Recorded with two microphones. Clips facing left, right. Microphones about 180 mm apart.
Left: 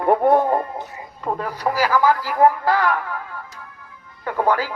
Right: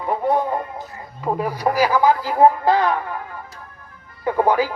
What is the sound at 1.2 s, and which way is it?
Speech, 10° right (ahead or behind).